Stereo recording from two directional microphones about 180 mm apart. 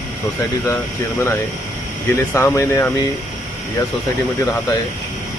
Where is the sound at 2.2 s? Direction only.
15° left (ahead or behind).